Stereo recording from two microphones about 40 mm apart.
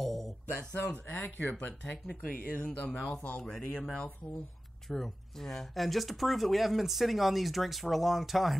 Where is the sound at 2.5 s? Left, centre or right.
Left.